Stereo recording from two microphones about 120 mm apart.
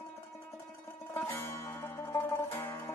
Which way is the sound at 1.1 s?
25° left (ahead or behind).